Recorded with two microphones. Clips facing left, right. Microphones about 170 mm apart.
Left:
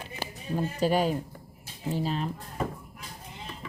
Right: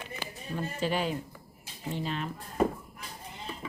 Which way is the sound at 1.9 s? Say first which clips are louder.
Left 4 dB; 35° left (ahead or behind).